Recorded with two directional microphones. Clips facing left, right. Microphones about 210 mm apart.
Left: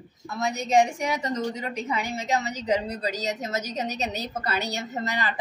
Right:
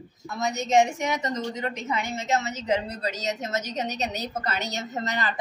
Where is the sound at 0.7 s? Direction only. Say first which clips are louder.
Even; 30° left (ahead or behind).